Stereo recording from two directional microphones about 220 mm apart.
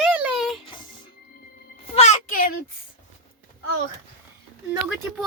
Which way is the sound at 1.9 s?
30° left (ahead or behind).